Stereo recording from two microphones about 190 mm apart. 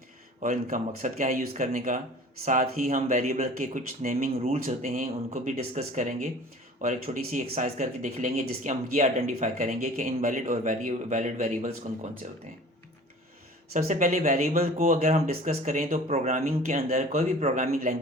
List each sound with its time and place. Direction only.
0.4 s speech: 40° right (ahead or behind)
13.7 s speech: 40° right (ahead or behind)